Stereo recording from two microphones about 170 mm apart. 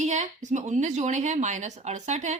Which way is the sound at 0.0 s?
45° right (ahead or behind).